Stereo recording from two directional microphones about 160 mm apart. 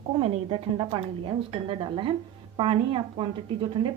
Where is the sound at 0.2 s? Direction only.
35° right (ahead or behind).